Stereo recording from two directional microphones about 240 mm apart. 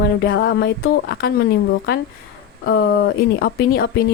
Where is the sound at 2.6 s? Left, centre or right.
Left.